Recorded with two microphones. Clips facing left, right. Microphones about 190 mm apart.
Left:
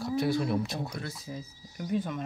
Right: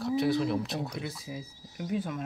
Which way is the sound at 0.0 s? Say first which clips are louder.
Right 1 dB; centre (ahead or behind).